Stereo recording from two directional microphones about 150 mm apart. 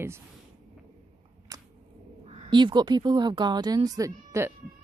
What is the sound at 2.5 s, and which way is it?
A woman's voice, 30° right (ahead or behind).